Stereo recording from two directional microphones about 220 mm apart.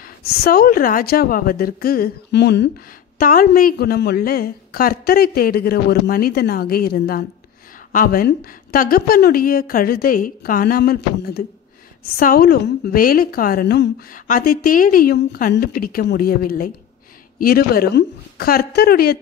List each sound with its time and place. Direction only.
0.0 s a woman's voice: 45° left (ahead or behind)